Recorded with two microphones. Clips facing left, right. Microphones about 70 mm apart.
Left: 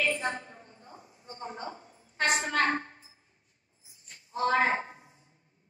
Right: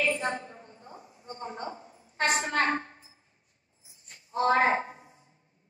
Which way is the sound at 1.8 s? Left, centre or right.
Centre.